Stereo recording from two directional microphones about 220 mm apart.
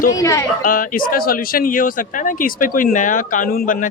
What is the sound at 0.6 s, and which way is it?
Speech, 40° left (ahead or behind).